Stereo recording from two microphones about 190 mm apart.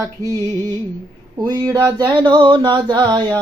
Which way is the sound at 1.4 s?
20° right (ahead or behind).